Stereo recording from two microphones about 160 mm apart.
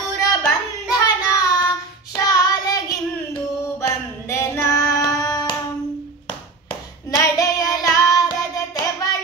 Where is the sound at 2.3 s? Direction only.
25° left (ahead or behind).